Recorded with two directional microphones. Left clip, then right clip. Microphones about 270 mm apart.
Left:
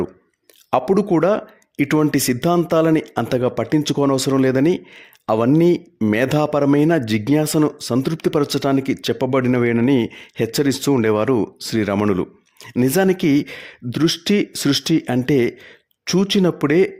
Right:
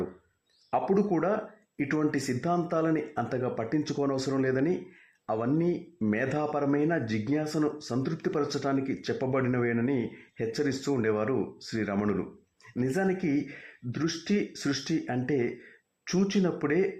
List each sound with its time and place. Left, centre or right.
0.7 s speech: left